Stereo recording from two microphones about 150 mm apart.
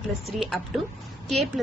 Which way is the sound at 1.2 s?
Centre (ahead or behind).